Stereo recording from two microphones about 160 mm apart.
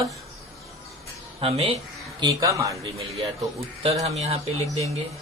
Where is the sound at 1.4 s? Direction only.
35° right (ahead or behind).